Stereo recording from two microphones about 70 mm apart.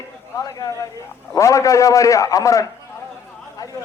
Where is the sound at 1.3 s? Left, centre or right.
Left.